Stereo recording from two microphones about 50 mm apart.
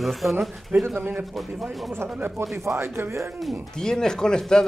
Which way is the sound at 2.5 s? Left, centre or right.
Right.